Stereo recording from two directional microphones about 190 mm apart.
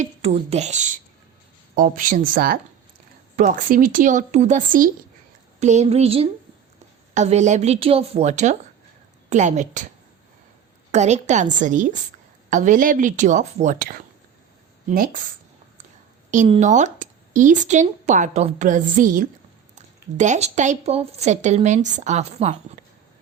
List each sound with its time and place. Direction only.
0.0 s a woman's voice: 35° right (ahead or behind)
10.9 s a woman's voice: 35° right (ahead or behind)
16.5 s a woman's voice: 40° right (ahead or behind)